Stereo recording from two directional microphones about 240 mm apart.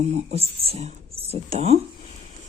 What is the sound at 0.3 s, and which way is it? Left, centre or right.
A woman's voice, right.